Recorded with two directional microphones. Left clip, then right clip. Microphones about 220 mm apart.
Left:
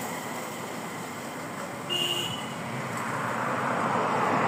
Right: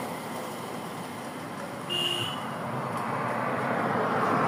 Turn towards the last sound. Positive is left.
turn(degrees=-45)  # may be behind; listen again after turning